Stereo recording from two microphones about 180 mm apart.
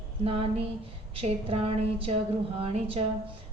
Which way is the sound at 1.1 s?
30° right (ahead or behind).